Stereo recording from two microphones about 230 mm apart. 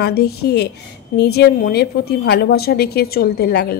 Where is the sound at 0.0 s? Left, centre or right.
Left.